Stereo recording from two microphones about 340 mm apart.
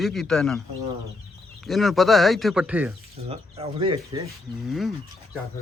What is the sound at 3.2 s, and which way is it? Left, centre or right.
Speech, centre.